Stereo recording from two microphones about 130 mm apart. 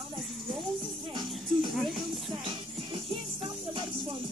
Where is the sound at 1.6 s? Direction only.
Centre (ahead or behind).